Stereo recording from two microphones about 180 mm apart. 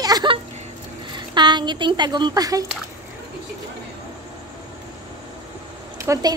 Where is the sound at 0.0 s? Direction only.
25° right (ahead or behind).